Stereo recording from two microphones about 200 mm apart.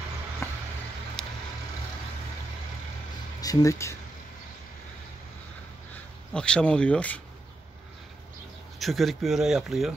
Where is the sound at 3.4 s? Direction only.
15° left (ahead or behind).